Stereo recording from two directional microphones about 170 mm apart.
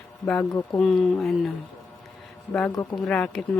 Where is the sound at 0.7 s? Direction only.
Centre (ahead or behind).